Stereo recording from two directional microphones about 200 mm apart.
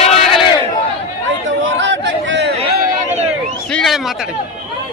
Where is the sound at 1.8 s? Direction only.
65° right (ahead or behind).